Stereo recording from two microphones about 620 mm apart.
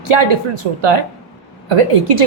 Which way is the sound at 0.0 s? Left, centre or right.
Right.